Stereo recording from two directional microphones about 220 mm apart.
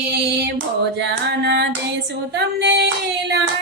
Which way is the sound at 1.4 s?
50° right (ahead or behind).